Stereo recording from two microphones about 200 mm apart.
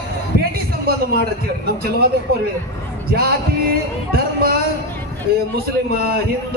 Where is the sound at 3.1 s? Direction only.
50° right (ahead or behind).